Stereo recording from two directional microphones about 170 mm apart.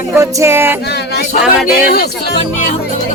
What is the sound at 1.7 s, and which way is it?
Speech, 65° left (ahead or behind).